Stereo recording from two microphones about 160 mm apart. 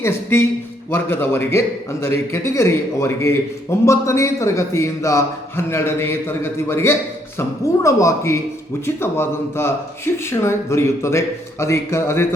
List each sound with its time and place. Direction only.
0.0 s a man's voice: 15° left (ahead or behind)